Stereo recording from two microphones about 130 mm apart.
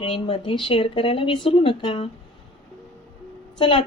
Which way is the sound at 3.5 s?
40° left (ahead or behind).